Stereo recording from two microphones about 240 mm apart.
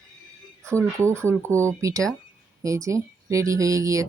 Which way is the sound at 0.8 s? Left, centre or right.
Centre.